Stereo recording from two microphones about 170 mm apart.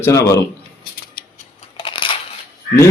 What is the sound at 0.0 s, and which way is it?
Speech, 20° left (ahead or behind).